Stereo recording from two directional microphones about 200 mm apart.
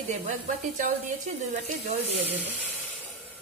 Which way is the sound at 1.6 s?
35° right (ahead or behind).